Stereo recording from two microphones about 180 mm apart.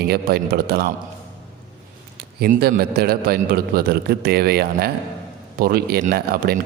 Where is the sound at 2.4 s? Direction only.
60° right (ahead or behind).